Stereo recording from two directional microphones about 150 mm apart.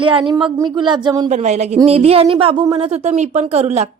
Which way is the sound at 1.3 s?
50° right (ahead or behind).